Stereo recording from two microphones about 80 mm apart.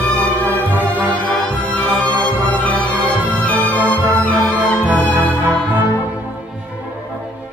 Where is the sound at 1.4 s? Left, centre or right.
Centre.